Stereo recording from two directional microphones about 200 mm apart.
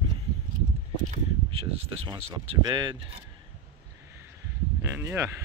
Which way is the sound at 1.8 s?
25° right (ahead or behind).